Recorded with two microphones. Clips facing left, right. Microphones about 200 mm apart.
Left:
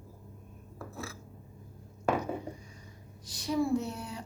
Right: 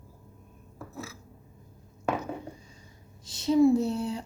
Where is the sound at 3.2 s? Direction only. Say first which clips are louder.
Right 9 dB; 25° right (ahead or behind).